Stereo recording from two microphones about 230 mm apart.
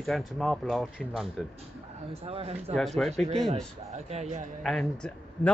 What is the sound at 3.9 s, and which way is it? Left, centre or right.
Speech, right.